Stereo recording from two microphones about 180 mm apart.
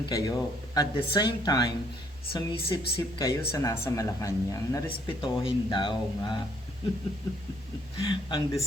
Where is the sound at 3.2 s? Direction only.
15° left (ahead or behind).